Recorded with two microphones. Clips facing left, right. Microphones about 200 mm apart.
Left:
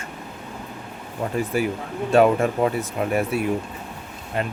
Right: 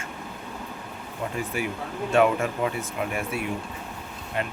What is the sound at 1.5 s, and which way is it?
Speech, 40° left (ahead or behind).